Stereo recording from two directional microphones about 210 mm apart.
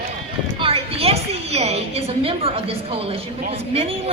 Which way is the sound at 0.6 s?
30° right (ahead or behind).